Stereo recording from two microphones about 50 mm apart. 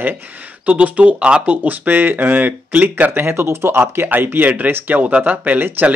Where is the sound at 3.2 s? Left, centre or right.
Right.